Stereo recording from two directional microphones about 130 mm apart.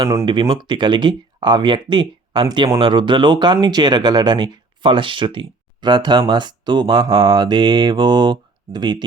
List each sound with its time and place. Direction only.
0.3 s speech: 40° right (ahead or behind)